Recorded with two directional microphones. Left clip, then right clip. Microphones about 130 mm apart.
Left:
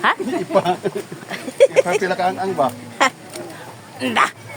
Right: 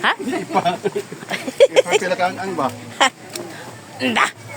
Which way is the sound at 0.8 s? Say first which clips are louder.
Right 1 dB; 65° left (ahead or behind).